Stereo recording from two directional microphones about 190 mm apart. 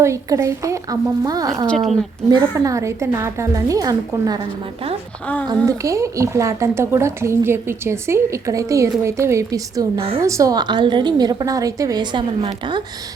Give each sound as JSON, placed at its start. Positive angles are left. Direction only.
{"t": 0.0, "sound": "speech", "side_deg": -15}
{"t": 1.6, "sound": "speech", "side_deg": 0}
{"t": 2.3, "sound": "speech", "side_deg": -15}
{"t": 5.6, "sound": "a woman's voice", "side_deg": -15}